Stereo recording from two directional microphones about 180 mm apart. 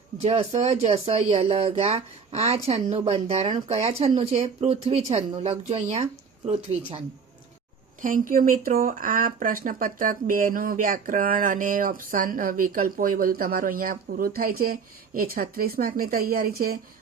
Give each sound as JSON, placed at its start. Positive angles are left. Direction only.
{"t": 0.2, "sound": "speech", "side_deg": -35}
{"t": 8.0, "sound": "speech", "side_deg": -50}